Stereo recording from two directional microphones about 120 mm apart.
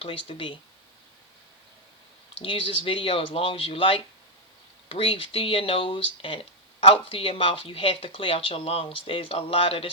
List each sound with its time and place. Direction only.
0.0 s speech: 50° left (ahead or behind)
2.4 s speech: 50° left (ahead or behind)